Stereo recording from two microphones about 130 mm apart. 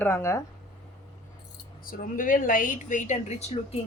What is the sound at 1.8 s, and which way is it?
Speech, 90° left.